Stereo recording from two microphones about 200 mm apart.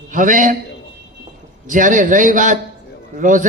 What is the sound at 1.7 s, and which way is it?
A man's voice, 40° right (ahead or behind).